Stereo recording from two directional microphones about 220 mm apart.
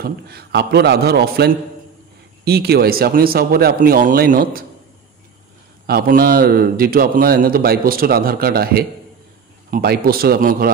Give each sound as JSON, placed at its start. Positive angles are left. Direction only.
{"t": 0.0, "sound": "a man's voice", "side_deg": -45}
{"t": 5.9, "sound": "a man's voice", "side_deg": -45}